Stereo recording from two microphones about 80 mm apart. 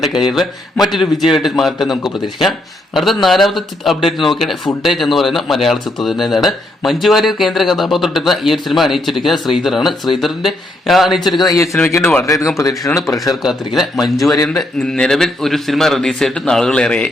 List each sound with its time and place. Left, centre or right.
0.0 s speech: centre
11.4 s a man's voice: left
13.4 s a man's voice: centre